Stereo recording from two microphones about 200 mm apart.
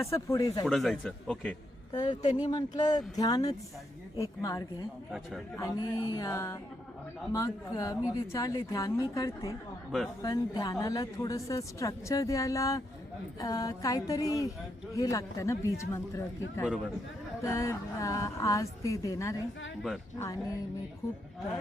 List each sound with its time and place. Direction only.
0.0 s a woman's voice: 15° left (ahead or behind)
0.6 s a man's voice: centre (ahead or behind)
1.9 s a woman's voice: 20° left (ahead or behind)
17.4 s a woman's voice: 15° left (ahead or behind)